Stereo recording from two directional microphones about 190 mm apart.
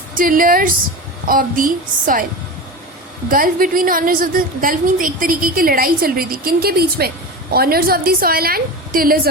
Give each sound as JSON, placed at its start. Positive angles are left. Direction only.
{"t": 0.1, "sound": "a woman's voice", "side_deg": -45}
{"t": 3.2, "sound": "a woman's voice", "side_deg": -45}